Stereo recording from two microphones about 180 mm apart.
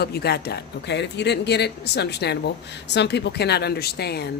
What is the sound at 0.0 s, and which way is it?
Speech, 60° left (ahead or behind).